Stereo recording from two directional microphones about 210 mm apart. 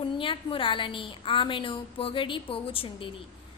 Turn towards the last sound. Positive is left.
turn(degrees=25)  # may be behind; listen again after turning